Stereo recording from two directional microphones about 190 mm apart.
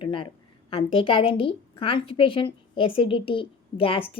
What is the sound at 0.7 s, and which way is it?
A woman's voice, 30° left (ahead or behind).